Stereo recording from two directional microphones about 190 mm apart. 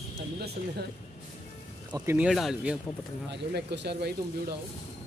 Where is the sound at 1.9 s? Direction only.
20° right (ahead or behind).